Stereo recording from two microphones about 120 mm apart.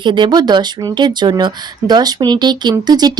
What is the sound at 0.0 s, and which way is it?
Speech, 40° right (ahead or behind).